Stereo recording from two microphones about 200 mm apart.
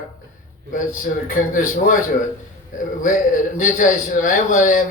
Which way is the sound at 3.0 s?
40° left (ahead or behind).